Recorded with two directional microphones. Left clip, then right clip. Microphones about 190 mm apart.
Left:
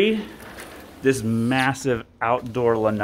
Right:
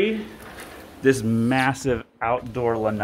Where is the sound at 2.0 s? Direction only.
20° left (ahead or behind).